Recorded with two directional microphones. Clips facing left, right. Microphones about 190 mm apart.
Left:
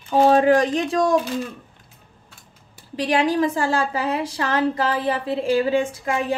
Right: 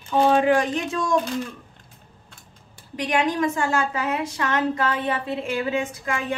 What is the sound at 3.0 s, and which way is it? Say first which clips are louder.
A woman's voice: left 3 dB; 30° left (ahead or behind).